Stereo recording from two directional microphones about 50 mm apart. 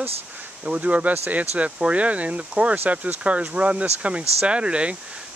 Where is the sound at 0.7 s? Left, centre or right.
Right.